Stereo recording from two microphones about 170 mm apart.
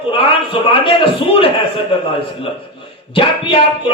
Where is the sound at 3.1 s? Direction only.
30° left (ahead or behind).